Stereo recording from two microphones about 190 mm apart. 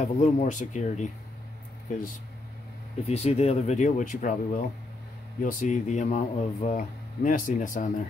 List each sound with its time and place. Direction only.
0.0 s speech: 40° left (ahead or behind)
3.1 s speech: 35° left (ahead or behind)